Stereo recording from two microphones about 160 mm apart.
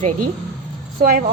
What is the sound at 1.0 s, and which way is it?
Speech, 65° right (ahead or behind).